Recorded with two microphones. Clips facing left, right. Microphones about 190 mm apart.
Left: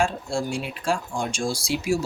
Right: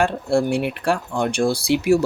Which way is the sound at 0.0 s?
60° right (ahead or behind).